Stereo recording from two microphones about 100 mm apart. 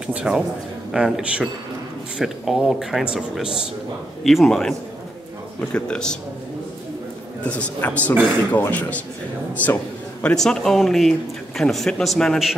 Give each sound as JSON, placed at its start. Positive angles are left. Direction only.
{"t": 0.0, "sound": "a man's voice", "side_deg": -10}
{"t": 7.4, "sound": "a man's voice", "side_deg": 15}